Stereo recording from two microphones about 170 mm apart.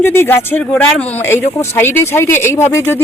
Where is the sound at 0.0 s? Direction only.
15° left (ahead or behind).